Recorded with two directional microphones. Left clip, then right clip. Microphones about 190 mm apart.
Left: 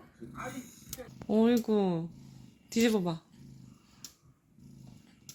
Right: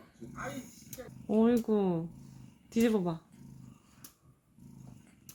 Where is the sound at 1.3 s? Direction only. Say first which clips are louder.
Left 1 dB; 10° left (ahead or behind).